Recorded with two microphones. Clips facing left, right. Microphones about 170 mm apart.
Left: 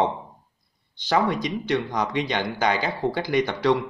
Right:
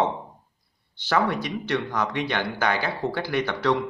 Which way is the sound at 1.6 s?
15° left (ahead or behind).